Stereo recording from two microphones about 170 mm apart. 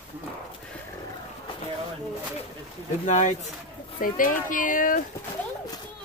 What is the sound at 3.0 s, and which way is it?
Speech, 45° left (ahead or behind).